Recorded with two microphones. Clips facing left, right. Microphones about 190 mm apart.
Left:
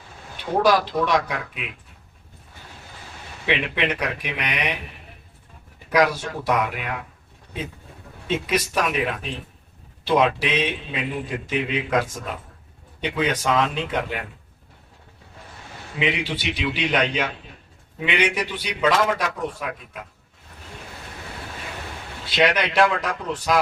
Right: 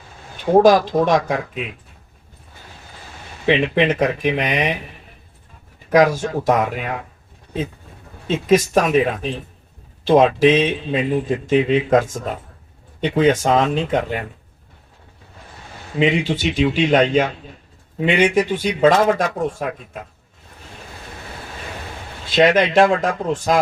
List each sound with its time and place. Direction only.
0.5 s speech: 45° right (ahead or behind)
3.4 s speech: 45° right (ahead or behind)
5.9 s speech: 45° right (ahead or behind)
8.4 s speech: 45° right (ahead or behind)
16.0 s speech: 45° right (ahead or behind)
22.3 s speech: 45° right (ahead or behind)